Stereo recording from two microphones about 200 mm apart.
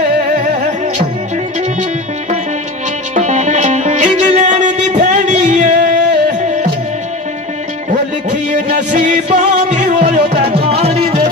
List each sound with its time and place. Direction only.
3.2 s music: 35° right (ahead or behind)
8.6 s music: 40° right (ahead or behind)